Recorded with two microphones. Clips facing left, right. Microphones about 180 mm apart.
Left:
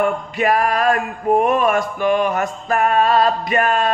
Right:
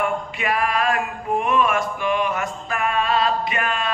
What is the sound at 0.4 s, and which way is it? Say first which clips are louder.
Male singing: left 6 dB; 40° left (ahead or behind).